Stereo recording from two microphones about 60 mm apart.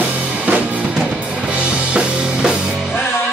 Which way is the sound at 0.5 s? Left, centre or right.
Right.